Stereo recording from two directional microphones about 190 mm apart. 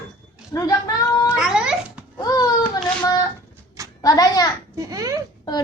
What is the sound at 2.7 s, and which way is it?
Child singing, 20° left (ahead or behind).